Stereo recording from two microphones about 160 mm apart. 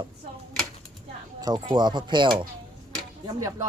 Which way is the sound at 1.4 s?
25° right (ahead or behind).